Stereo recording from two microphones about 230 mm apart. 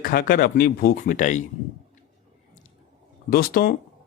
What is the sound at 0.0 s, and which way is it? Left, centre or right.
Speech, left.